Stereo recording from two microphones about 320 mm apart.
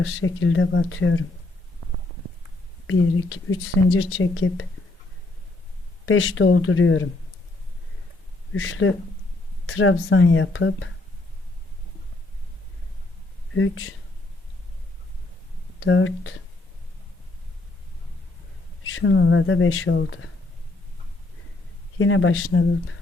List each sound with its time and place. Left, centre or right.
0.0 s speech: left
2.8 s speech: left
6.1 s speech: left
8.5 s speech: left
13.6 s speech: left
15.8 s speech: left
18.9 s speech: left
21.9 s speech: left